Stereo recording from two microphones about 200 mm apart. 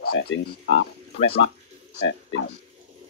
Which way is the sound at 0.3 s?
65° left (ahead or behind).